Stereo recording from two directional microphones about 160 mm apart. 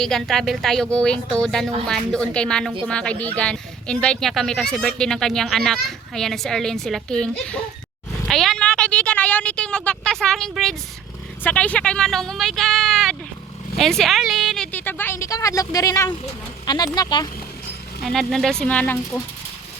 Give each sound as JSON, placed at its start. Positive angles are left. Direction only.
{"t": 0.0, "sound": "speech", "side_deg": 0}
{"t": 8.3, "sound": "a sound", "side_deg": 0}
{"t": 11.4, "sound": "a woman's voice", "side_deg": 10}
{"t": 18.0, "sound": "speech", "side_deg": 0}